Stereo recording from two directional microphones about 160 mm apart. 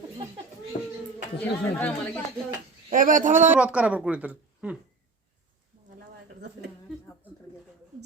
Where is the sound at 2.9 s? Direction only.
55° right (ahead or behind).